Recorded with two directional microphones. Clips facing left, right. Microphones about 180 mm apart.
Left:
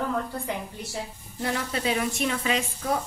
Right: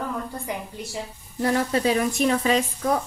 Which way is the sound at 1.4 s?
40° right (ahead or behind).